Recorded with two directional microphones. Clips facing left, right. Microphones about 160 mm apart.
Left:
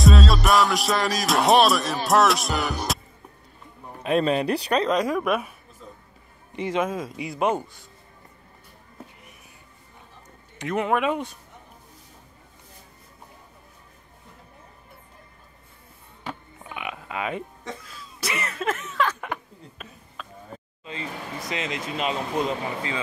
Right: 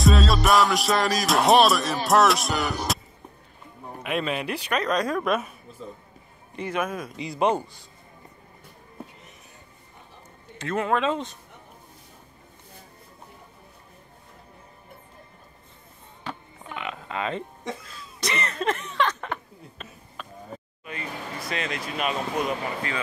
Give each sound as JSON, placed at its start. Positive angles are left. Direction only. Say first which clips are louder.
{"t": 0.0, "sound": "music", "louder": "left 1 dB", "side_deg": 0}
{"t": 4.0, "sound": "speech", "louder": "left 6 dB", "side_deg": 35}
{"t": 4.8, "sound": "speech", "louder": "left 2 dB", "side_deg": 15}
{"t": 6.5, "sound": "speech", "louder": "left 3 dB", "side_deg": 20}
{"t": 7.2, "sound": "music", "louder": "right 2 dB", "side_deg": 5}
{"t": 10.6, "sound": "speech", "louder": "left 1 dB", "side_deg": 15}
{"t": 16.3, "sound": "music", "louder": "even", "side_deg": 10}
{"t": 17.9, "sound": "speech", "louder": "even", "side_deg": 5}
{"t": 20.2, "sound": "a sound", "louder": "even", "side_deg": 0}
{"t": 20.8, "sound": "speech", "louder": "left 1 dB", "side_deg": 20}